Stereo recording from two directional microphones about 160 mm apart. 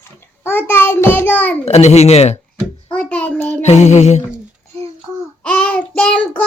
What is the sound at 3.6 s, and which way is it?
Speech, 45° left (ahead or behind).